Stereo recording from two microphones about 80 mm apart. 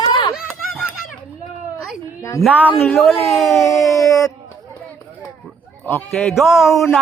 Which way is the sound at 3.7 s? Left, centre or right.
Left.